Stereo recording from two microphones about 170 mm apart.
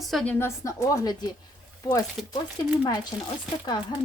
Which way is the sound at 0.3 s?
15° left (ahead or behind).